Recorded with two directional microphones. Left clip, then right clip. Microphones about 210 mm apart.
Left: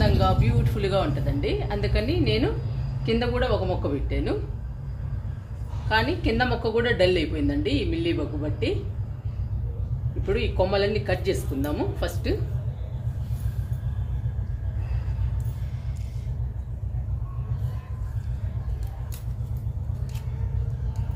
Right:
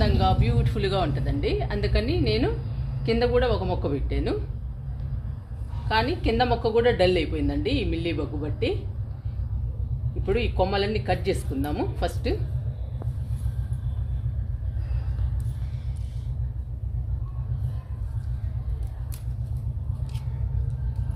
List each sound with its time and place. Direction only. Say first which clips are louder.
0.0 s a woman's voice: even; 40° right (ahead or behind)
5.9 s a woman's voice: even; 40° right (ahead or behind)
10.2 s a woman's voice: even; 40° right (ahead or behind)